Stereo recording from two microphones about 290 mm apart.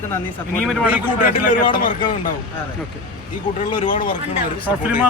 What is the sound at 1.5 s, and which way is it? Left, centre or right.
Speech, centre.